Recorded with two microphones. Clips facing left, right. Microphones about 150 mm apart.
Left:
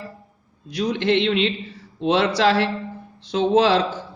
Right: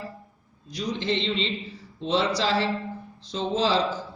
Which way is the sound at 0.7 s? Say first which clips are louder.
Left 7 dB; 65° left (ahead or behind).